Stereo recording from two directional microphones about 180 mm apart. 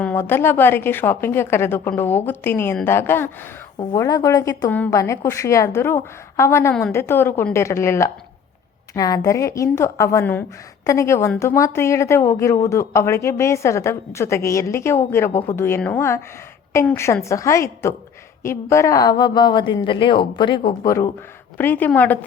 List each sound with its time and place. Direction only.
0.0 s a woman's voice: 10° left (ahead or behind)